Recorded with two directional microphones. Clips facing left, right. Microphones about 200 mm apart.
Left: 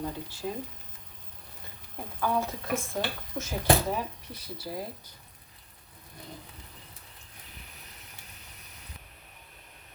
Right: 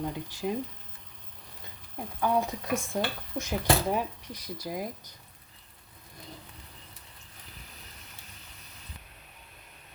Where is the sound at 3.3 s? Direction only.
20° right (ahead or behind).